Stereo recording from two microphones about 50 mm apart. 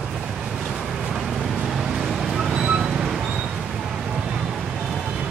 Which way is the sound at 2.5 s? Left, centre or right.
Centre.